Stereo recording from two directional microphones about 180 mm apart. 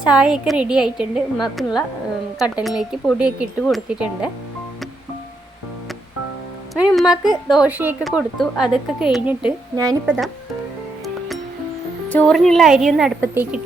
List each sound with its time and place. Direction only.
0.0 s a woman's voice: 5° right (ahead or behind)
6.9 s a woman's voice: 5° right (ahead or behind)
9.7 s a woman's voice: 20° right (ahead or behind)
12.0 s a woman's voice: 5° left (ahead or behind)